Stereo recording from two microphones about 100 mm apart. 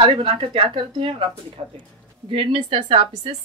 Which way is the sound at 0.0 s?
55° right (ahead or behind).